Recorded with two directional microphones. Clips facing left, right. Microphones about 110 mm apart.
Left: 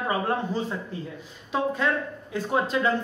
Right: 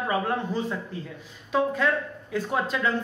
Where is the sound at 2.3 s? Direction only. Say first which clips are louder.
Left 2 dB; 25° left (ahead or behind).